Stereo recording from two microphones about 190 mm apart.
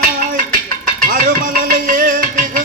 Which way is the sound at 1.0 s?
50° right (ahead or behind).